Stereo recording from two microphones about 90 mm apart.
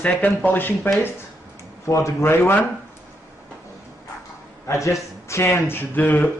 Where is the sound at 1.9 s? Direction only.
30° left (ahead or behind).